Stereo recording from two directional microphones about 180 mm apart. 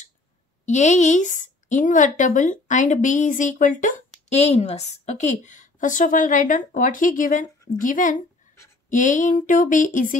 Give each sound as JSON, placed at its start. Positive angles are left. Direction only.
{"t": 0.7, "sound": "a woman's voice", "side_deg": 40}